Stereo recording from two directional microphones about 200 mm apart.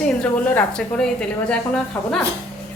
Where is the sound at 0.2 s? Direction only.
5° left (ahead or behind).